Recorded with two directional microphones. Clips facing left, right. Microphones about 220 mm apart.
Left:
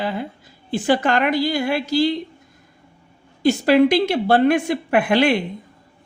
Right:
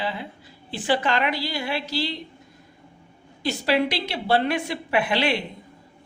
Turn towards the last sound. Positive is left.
turn(degrees=50)  # may be behind; listen again after turning